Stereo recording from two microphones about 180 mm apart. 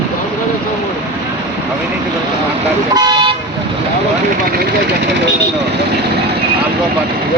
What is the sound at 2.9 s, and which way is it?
Toot, 25° right (ahead or behind).